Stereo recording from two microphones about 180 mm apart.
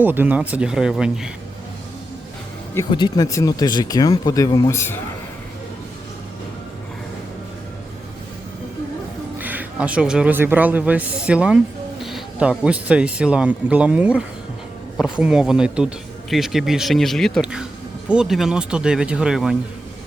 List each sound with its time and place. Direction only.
0.0 s speech: 10° right (ahead or behind)
2.9 s speech: 25° left (ahead or behind)
9.4 s a man's voice: 10° right (ahead or behind)